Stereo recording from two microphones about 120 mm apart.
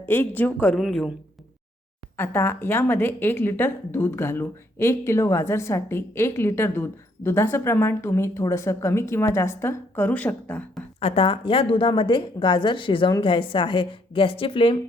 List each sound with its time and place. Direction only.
0.0 s speech: 15° left (ahead or behind)
0.8 s speech: centre (ahead or behind)
2.1 s speech: 20° left (ahead or behind)
11.0 s a woman's voice: 55° left (ahead or behind)